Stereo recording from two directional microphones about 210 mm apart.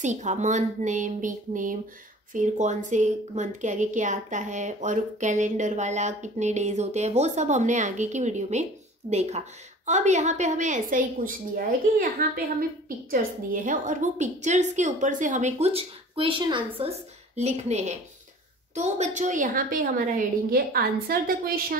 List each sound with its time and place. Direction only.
0.0 s a woman's voice: 35° right (ahead or behind)